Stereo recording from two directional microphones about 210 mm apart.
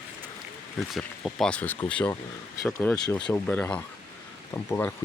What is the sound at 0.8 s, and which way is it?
Speech, centre (ahead or behind).